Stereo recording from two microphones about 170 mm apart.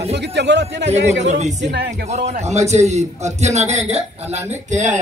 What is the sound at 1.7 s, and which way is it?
Speech, 75° right (ahead or behind).